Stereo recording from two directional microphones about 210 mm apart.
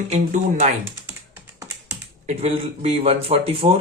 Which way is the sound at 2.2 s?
30° right (ahead or behind).